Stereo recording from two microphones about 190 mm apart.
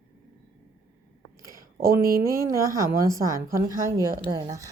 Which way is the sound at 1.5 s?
50° right (ahead or behind).